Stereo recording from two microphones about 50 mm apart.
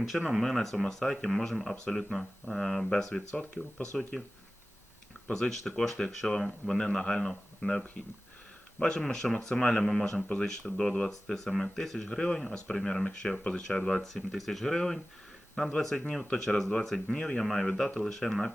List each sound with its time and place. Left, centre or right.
0.3 s speech: centre
1.7 s speech: centre
2.0 s speech: centre
5.3 s speech: centre
17.4 s speech: centre